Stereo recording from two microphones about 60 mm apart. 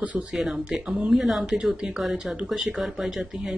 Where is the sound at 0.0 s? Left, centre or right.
Right.